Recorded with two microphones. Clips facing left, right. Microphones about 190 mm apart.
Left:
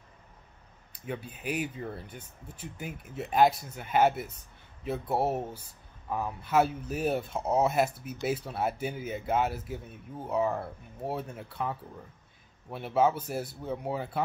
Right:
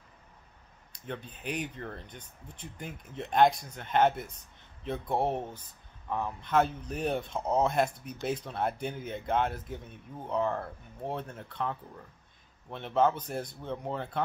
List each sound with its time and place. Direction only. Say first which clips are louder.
0.9 s speech: left 2 dB; 5° left (ahead or behind)